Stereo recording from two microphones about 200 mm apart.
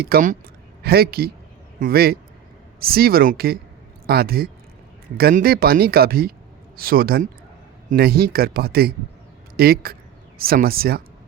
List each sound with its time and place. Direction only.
0.0 s speech: 45° right (ahead or behind)